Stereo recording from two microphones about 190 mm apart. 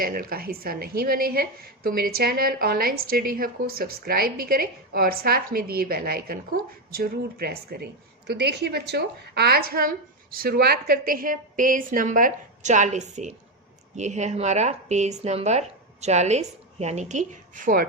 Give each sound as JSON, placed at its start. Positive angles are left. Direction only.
{"t": 0.0, "sound": "a woman's voice", "side_deg": -50}